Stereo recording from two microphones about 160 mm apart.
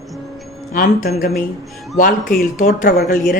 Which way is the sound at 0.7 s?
65° left (ahead or behind).